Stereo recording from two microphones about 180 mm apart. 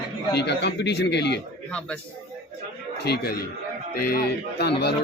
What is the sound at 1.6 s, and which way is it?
Speech, 5° left (ahead or behind).